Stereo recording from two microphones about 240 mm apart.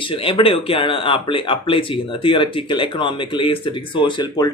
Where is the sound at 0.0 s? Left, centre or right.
Left.